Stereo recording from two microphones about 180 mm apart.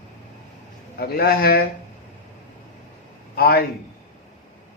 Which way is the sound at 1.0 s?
60° left (ahead or behind).